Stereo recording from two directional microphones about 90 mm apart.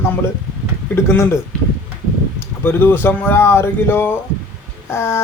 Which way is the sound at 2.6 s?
25° left (ahead or behind).